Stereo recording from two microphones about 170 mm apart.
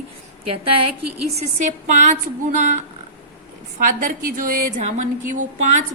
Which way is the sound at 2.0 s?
45° right (ahead or behind).